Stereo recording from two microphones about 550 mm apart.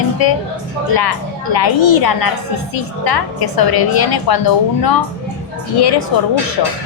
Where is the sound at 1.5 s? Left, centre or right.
Left.